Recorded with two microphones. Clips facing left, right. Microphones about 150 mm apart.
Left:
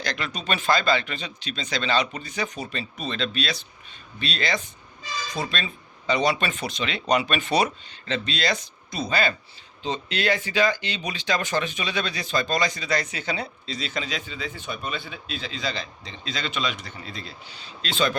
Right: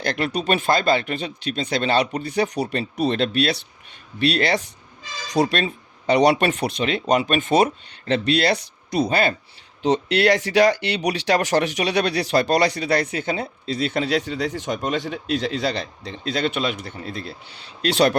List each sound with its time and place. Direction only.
0.0 s speech: 55° right (ahead or behind)
9.8 s speech: 75° right (ahead or behind)